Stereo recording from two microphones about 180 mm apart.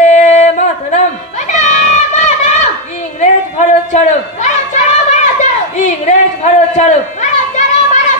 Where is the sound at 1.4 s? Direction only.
40° left (ahead or behind).